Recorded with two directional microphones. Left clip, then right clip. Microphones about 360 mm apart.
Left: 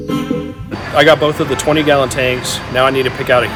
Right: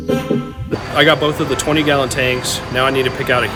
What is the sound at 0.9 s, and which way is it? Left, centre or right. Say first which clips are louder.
Speech: left 3 dB; centre.